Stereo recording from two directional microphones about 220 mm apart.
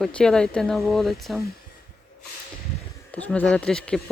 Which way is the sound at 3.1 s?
5° left (ahead or behind).